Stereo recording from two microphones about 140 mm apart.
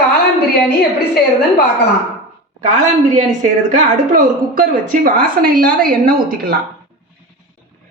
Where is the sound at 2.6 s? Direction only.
60° right (ahead or behind); by 6.6 s 90° right.